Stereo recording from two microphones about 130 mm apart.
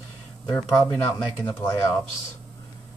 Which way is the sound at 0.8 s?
20° left (ahead or behind).